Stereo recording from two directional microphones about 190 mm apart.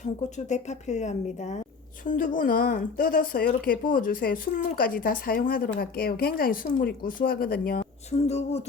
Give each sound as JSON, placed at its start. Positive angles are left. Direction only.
{"t": 0.0, "sound": "a woman's voice", "side_deg": 40}
{"t": 8.1, "sound": "a woman's voice", "side_deg": 35}